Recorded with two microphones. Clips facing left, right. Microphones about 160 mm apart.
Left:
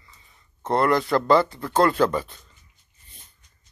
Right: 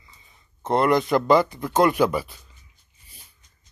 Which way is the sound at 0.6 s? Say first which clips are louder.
Right 1 dB; 20° right (ahead or behind).